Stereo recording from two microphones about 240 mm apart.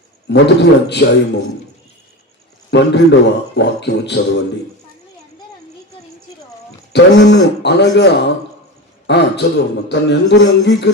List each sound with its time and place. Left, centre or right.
0.3 s a man's voice: left
2.6 s a man's voice: left
6.9 s a man's voice: left